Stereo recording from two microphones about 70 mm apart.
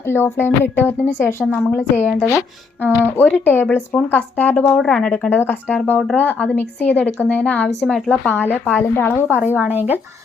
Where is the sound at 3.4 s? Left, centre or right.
Left.